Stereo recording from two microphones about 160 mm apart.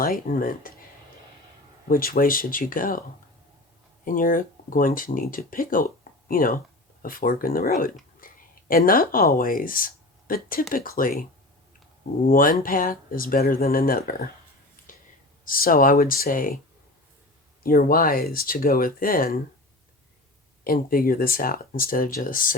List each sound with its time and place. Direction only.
0.0 s speech: 65° left (ahead or behind)
1.9 s speech: 65° left (ahead or behind)
4.0 s speech: 60° left (ahead or behind)
14.9 s whispering: 60° left (ahead or behind)
15.4 s speech: 65° left (ahead or behind)
17.6 s speech: 65° left (ahead or behind)
20.7 s speech: 65° left (ahead or behind)